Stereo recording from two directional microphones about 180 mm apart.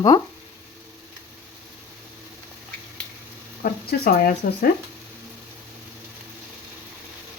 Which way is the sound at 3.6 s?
55° left (ahead or behind).